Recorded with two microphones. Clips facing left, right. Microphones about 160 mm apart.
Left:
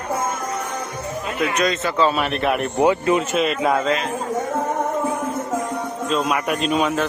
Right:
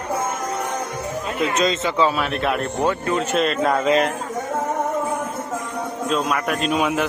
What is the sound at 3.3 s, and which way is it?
Speech, 5° left (ahead or behind).